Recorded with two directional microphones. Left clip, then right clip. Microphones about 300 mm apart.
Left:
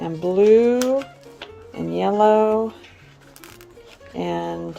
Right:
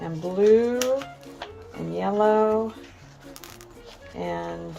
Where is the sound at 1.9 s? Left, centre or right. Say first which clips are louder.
Left 5 dB; left.